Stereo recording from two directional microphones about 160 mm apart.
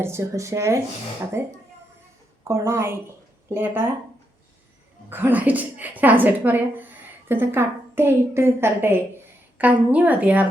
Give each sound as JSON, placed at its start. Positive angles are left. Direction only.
{"t": 0.0, "sound": "a woman's voice", "side_deg": -15}
{"t": 5.0, "sound": "a woman's voice", "side_deg": -15}